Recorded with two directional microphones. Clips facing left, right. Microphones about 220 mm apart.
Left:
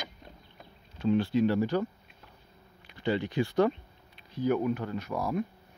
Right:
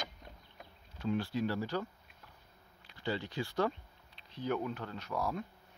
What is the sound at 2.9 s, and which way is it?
Speech, 20° left (ahead or behind).